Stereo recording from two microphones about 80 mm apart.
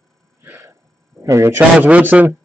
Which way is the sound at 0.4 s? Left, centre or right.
Right.